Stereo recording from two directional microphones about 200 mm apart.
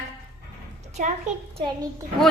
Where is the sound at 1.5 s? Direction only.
20° right (ahead or behind).